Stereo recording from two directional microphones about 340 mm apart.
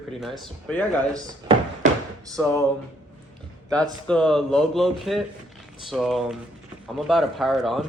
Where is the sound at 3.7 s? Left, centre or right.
Centre.